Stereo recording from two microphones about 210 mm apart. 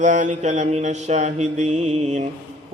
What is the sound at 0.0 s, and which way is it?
Mantra, 35° right (ahead or behind).